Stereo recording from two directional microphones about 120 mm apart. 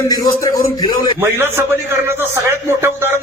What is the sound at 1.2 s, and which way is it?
Speech, 20° right (ahead or behind).